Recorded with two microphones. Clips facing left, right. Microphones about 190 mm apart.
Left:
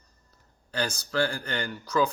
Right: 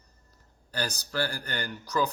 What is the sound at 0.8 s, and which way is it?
Speech, 35° right (ahead or behind).